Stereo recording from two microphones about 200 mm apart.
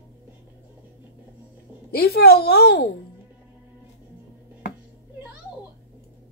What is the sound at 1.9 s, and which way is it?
A woman's voice, 50° left (ahead or behind).